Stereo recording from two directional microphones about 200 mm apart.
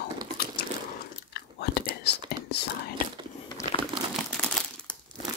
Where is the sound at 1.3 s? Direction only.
55° left (ahead or behind).